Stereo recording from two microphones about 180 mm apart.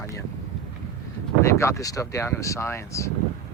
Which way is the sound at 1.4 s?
15° left (ahead or behind).